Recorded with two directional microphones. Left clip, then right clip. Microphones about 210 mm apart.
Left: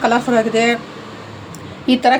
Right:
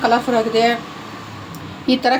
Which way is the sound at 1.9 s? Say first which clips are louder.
Left 3 dB; 15° left (ahead or behind).